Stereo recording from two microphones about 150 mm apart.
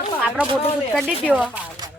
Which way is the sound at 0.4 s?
10° right (ahead or behind).